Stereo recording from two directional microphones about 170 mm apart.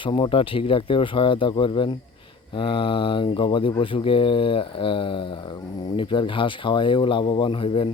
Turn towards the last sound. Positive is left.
turn(degrees=30)  # may be behind; listen again after turning